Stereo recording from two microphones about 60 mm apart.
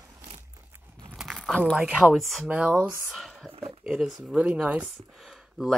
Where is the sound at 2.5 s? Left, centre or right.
Right.